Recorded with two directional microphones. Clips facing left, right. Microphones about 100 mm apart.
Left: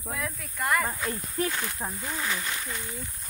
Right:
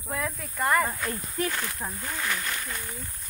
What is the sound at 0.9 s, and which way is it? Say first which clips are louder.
Speech: even; 5° left (ahead or behind).